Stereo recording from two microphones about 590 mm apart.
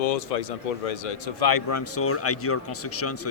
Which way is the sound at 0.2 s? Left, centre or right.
Left.